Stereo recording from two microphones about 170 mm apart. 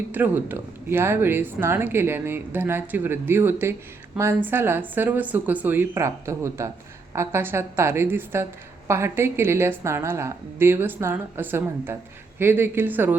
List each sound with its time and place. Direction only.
0.1 s speech: 10° right (ahead or behind)